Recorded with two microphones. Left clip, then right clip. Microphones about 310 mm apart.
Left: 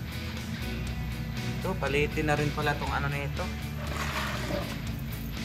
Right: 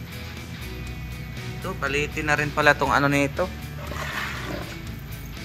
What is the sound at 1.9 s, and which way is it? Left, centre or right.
Speech, centre.